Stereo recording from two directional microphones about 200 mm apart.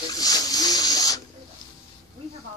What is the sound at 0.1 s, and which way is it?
Rub, 20° left (ahead or behind).